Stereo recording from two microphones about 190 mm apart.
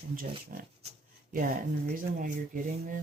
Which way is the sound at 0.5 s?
45° right (ahead or behind).